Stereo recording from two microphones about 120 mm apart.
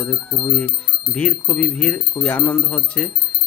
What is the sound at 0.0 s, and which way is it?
Speech, 10° left (ahead or behind).